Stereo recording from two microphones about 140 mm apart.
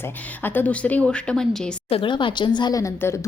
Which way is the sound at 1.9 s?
40° left (ahead or behind).